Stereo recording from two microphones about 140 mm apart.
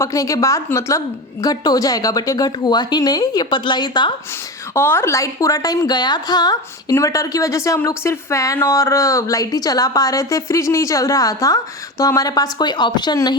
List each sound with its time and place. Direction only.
0.0 s a woman's voice: 25° left (ahead or behind)
4.7 s a woman's voice: 15° left (ahead or behind)